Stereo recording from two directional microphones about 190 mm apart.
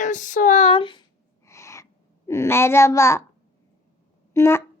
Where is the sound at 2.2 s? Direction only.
15° left (ahead or behind).